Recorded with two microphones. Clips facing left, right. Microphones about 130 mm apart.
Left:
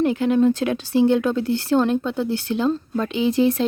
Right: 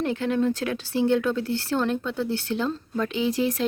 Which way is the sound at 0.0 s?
15° left (ahead or behind).